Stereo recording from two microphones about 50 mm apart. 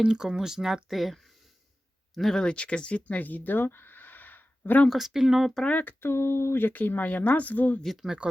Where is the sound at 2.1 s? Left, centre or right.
Centre; by 4.8 s left.